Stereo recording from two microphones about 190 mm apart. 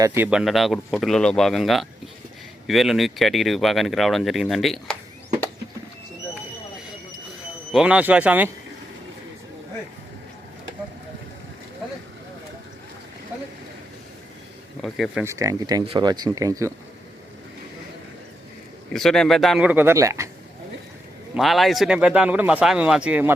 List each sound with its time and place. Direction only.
0.0 s speech: 10° right (ahead or behind)
7.7 s speech: 5° right (ahead or behind)
14.8 s speech: centre (ahead or behind)
15.2 s speech: 15° right (ahead or behind)
18.9 s speech: centre (ahead or behind); by 20.3 s 15° right (ahead or behind)
21.3 s speech: centre (ahead or behind)